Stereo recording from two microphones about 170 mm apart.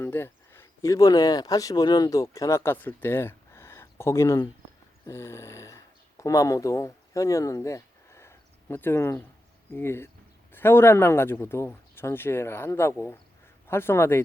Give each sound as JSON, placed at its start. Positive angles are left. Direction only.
{"t": 0.0, "sound": "speech", "side_deg": 15}
{"t": 5.0, "sound": "snoring", "side_deg": 15}
{"t": 9.7, "sound": "speech", "side_deg": 15}